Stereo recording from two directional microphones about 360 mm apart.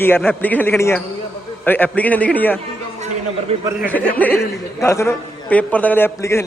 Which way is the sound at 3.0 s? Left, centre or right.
Centre.